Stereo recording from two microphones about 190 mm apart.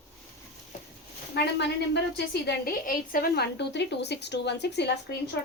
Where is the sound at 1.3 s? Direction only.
60° left (ahead or behind).